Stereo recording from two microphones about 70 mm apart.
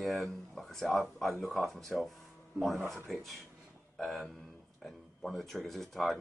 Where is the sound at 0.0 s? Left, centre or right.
Centre.